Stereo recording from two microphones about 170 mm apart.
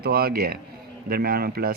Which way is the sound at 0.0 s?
60° right (ahead or behind).